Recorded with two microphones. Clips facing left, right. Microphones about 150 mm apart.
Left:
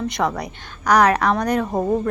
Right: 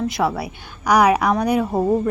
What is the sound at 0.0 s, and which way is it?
A woman's voice, 5° right (ahead or behind).